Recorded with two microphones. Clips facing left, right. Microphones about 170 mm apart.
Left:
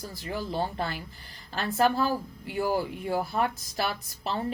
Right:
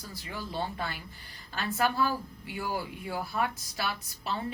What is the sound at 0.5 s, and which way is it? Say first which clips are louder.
A woman's voice: left 2 dB; 45° left (ahead or behind).